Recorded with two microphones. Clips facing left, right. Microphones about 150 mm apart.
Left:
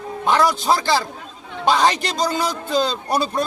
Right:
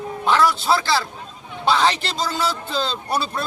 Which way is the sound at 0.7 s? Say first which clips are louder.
Left 1 dB; 40° left (ahead or behind).